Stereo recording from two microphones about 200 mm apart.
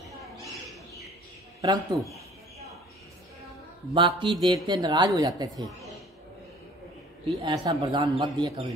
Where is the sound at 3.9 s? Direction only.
25° right (ahead or behind).